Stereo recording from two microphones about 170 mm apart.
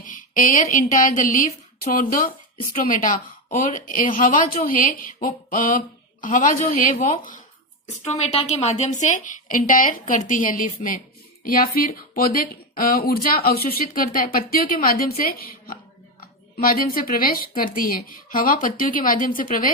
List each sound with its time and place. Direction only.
0.0 s a woman's voice: 50° left (ahead or behind)
8.0 s a woman's voice: 40° left (ahead or behind)